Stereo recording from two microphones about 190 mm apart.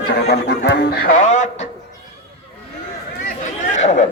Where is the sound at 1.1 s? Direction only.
40° left (ahead or behind).